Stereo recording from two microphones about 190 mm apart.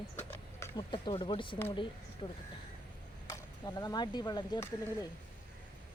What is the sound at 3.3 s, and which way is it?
Speech, 20° left (ahead or behind).